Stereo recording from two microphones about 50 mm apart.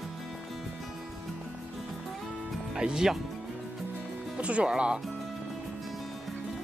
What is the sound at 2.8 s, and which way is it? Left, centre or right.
Speech, centre.